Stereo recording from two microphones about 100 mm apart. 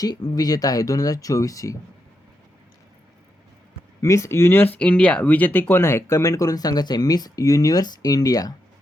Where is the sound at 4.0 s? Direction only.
30° left (ahead or behind).